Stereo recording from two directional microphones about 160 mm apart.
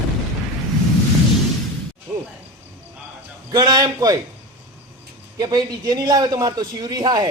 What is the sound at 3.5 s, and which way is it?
Speech, 25° right (ahead or behind).